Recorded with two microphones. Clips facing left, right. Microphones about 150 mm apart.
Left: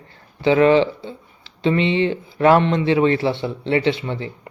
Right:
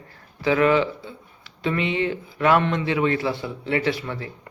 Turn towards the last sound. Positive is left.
turn(degrees=25)  # may be behind; listen again after turning